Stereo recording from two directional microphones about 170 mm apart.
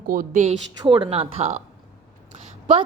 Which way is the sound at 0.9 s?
30° right (ahead or behind).